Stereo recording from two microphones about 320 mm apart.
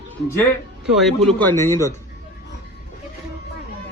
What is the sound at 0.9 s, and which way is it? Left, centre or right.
Speech, centre.